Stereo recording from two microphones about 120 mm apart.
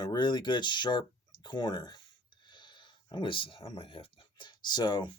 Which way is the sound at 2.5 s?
40° left (ahead or behind).